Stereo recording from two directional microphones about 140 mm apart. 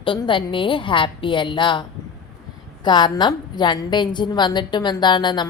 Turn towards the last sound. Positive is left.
turn(degrees=30)  # may be behind; listen again after turning